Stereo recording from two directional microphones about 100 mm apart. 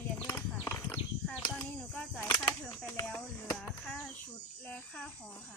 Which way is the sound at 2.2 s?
25° left (ahead or behind).